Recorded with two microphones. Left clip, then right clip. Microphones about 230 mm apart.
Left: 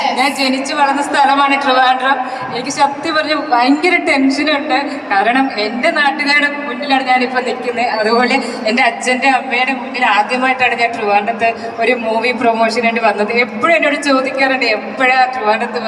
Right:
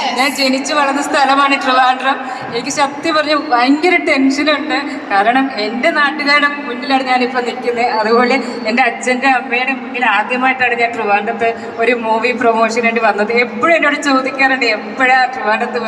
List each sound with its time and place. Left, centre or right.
0.0 s a man's voice: centre